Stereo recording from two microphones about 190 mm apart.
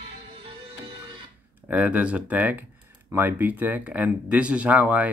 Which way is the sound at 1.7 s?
5° right (ahead or behind).